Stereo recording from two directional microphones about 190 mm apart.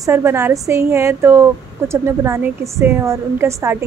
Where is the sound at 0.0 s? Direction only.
15° right (ahead or behind).